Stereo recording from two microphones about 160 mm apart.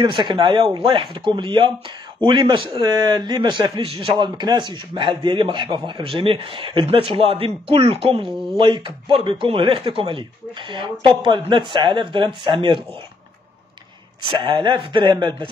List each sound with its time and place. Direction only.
0.0 s a man's voice: 30° right (ahead or behind)
14.3 s a man's voice: 30° right (ahead or behind)